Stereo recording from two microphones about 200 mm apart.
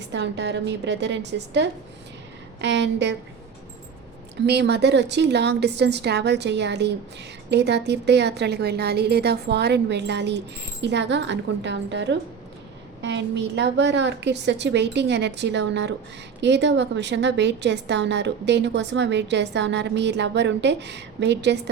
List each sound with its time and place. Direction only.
0.1 s a woman's voice: 60° right (ahead or behind)
4.4 s a woman's voice: 55° right (ahead or behind)